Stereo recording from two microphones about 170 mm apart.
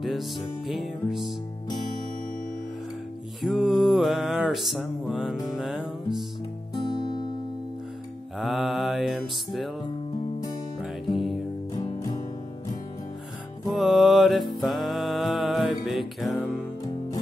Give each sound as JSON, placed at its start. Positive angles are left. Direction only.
{"t": 0.0, "sound": "music", "side_deg": 0}
{"t": 3.4, "sound": "music", "side_deg": 0}
{"t": 8.4, "sound": "music", "side_deg": 0}
{"t": 10.8, "sound": "music", "side_deg": 0}
{"t": 11.7, "sound": "music", "side_deg": 25}
{"t": 13.7, "sound": "music", "side_deg": 0}